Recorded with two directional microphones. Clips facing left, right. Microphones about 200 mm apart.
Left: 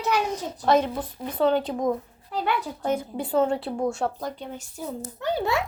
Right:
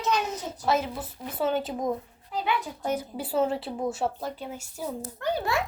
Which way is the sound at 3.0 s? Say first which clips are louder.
Left 2 dB; 5° right (ahead or behind).